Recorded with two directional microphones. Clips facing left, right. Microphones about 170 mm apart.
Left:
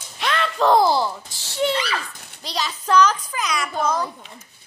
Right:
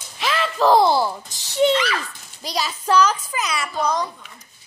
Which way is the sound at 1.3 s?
20° right (ahead or behind).